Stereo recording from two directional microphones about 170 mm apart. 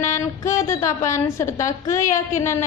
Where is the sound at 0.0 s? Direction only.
15° left (ahead or behind).